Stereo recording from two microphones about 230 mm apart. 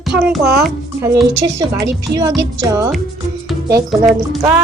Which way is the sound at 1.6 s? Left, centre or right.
Centre.